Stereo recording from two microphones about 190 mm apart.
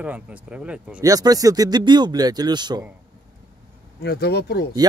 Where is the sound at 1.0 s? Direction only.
20° right (ahead or behind).